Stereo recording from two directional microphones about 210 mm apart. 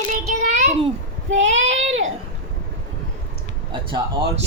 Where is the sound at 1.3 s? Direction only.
60° right (ahead or behind).